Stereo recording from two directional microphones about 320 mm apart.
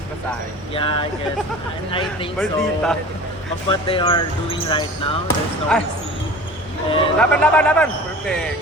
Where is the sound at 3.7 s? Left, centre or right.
Centre.